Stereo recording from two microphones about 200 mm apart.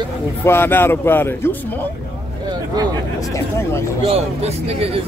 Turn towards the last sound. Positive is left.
turn(degrees=-30)  # may be behind; listen again after turning